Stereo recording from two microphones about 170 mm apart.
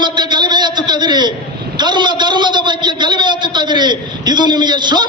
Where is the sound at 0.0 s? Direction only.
25° right (ahead or behind).